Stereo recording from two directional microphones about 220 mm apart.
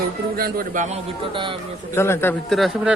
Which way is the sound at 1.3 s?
20° right (ahead or behind).